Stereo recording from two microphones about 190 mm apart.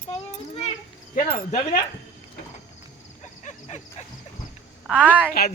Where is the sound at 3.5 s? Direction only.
35° left (ahead or behind).